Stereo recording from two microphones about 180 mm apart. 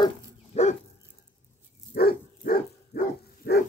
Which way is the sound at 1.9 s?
55° left (ahead or behind).